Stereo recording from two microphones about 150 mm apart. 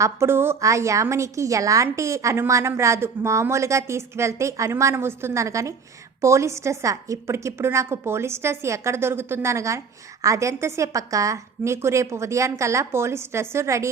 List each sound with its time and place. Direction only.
0.0 s a woman's voice: 15° right (ahead or behind)